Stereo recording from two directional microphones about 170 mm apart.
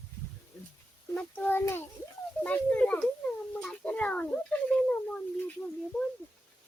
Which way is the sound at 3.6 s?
10° left (ahead or behind).